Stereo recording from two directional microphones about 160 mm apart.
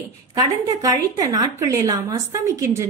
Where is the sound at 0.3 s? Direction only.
25° right (ahead or behind).